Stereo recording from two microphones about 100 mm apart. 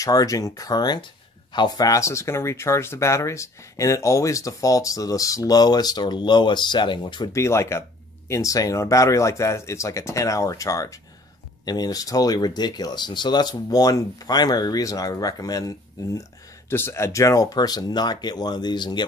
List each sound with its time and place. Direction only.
0.0 s speech: 35° left (ahead or behind)
1.9 s speech: 30° left (ahead or behind); by 7.2 s 50° left (ahead or behind)
7.3 s speech: 30° left (ahead or behind); by 19.0 s 45° left (ahead or behind)